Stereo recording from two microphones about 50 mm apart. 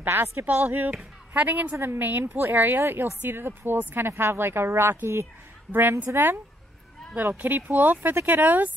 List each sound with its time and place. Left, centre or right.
0.1 s speech: right
1.3 s speech: right
2.2 s speech: right
2.5 s speech: right
5.7 s speech: right